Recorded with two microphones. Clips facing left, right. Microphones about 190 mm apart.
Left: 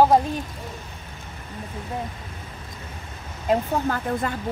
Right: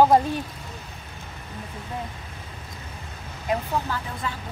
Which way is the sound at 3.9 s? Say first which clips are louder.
Left 6 dB; 50° left (ahead or behind).